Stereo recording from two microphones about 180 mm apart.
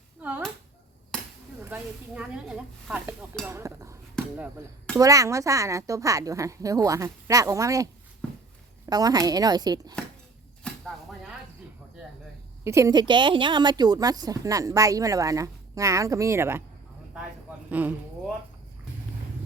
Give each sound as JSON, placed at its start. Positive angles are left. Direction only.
{"t": 0.2, "sound": "a sound", "side_deg": -10}
{"t": 1.1, "sound": "chop", "side_deg": 5}
{"t": 1.6, "sound": "speech", "side_deg": -10}
{"t": 3.4, "sound": "dishes", "side_deg": -15}
{"t": 4.2, "sound": "chop", "side_deg": 5}
{"t": 4.9, "sound": "speech", "side_deg": -20}
{"t": 8.9, "sound": "a woman's voice", "side_deg": -20}
{"t": 10.6, "sound": "a sound", "side_deg": 0}
{"t": 12.6, "sound": "a woman's voice", "side_deg": -15}
{"t": 17.7, "sound": "speech", "side_deg": -10}